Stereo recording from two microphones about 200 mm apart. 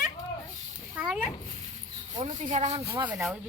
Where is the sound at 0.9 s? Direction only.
5° right (ahead or behind).